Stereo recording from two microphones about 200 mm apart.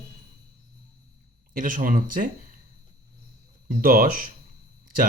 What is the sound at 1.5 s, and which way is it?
Speech, 45° right (ahead or behind).